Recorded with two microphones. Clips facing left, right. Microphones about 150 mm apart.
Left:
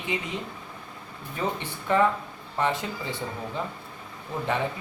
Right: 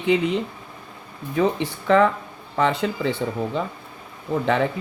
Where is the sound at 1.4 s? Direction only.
90° right.